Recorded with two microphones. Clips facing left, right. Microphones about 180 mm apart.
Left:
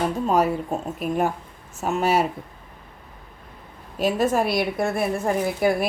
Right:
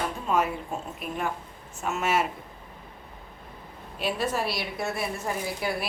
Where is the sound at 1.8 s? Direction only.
35° left (ahead or behind).